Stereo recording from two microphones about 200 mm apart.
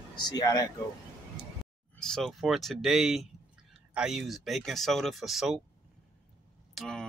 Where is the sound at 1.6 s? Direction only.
Centre (ahead or behind).